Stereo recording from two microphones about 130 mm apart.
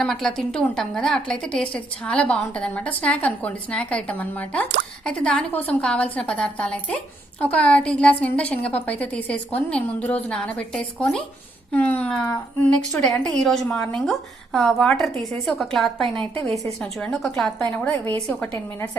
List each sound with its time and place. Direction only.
0.0 s a woman's voice: 5° left (ahead or behind)